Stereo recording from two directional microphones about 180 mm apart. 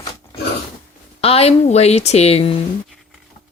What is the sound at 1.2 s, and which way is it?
A woman's voice, 35° left (ahead or behind).